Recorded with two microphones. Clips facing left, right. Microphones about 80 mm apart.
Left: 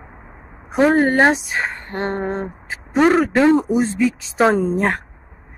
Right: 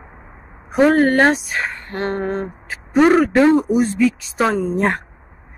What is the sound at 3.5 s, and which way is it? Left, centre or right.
Speech, left.